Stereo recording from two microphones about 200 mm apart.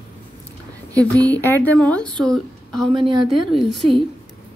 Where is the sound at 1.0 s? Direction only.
10° left (ahead or behind).